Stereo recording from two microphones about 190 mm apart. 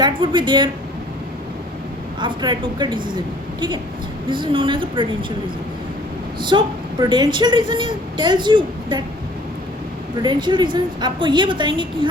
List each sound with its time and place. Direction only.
0.0 s speech: 25° right (ahead or behind)
2.2 s speech: 25° right (ahead or behind)
4.3 s speech: 25° right (ahead or behind)
6.5 s speech: 25° right (ahead or behind)
10.2 s speech: 25° right (ahead or behind)